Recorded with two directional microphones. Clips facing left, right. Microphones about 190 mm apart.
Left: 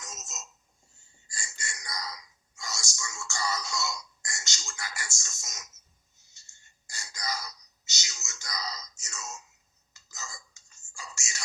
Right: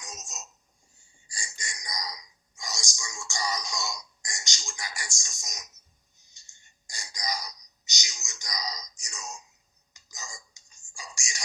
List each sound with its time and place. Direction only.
0.0 s a sound: 15° right (ahead or behind)
6.1 s gasp: 15° right (ahead or behind)
9.9 s whispering: 15° right (ahead or behind)